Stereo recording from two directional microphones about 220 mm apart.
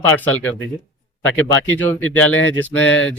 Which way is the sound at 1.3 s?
10° left (ahead or behind).